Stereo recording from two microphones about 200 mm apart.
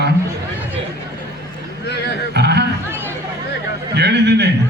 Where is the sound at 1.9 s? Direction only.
55° left (ahead or behind).